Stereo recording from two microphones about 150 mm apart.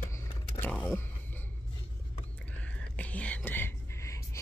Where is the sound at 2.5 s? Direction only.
10° left (ahead or behind).